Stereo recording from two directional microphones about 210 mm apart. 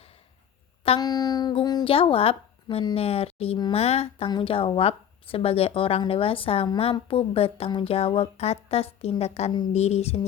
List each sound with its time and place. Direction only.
0.9 s speech: 20° left (ahead or behind)